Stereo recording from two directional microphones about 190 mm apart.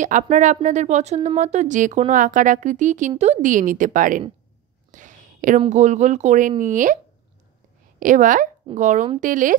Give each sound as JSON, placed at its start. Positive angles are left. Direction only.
{"t": 0.0, "sound": "a woman's voice", "side_deg": -40}
{"t": 4.9, "sound": "a sound", "side_deg": -40}
{"t": 5.7, "sound": "a woman's voice", "side_deg": -40}
{"t": 8.0, "sound": "a woman's voice", "side_deg": -45}